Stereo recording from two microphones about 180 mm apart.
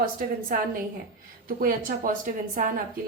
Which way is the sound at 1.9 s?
50° right (ahead or behind).